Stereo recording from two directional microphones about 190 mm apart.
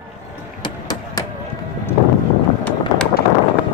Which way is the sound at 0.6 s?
20° left (ahead or behind).